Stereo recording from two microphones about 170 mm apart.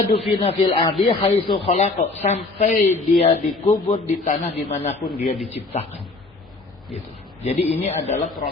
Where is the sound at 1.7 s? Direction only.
45° left (ahead or behind).